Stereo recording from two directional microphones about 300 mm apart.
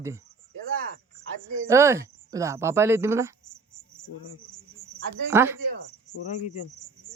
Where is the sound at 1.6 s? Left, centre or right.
Centre.